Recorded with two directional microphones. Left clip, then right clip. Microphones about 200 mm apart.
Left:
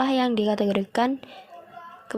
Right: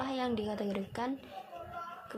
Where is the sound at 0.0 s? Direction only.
35° left (ahead or behind).